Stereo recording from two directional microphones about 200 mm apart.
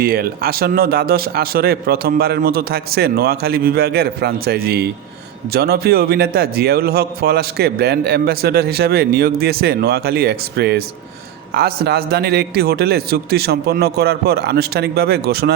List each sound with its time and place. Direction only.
0.0 s a man's voice: 50° right (ahead or behind)